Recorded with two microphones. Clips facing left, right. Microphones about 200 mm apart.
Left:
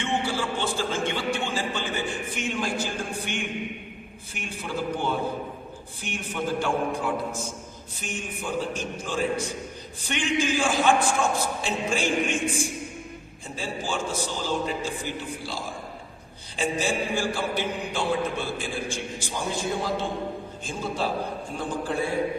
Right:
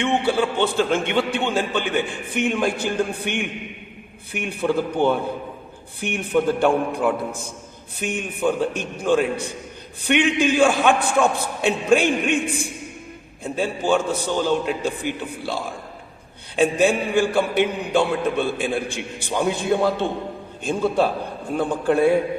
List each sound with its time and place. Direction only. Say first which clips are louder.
0.0 s a man's voice: right 7 dB; 60° right (ahead or behind)